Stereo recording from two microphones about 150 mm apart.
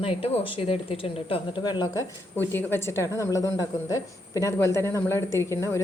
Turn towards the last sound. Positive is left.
turn(degrees=20)  # may be behind; listen again after turning